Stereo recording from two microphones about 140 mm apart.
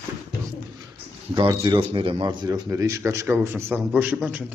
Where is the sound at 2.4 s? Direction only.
30° right (ahead or behind).